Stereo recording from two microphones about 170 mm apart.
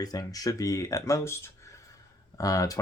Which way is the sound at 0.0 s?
20° left (ahead or behind).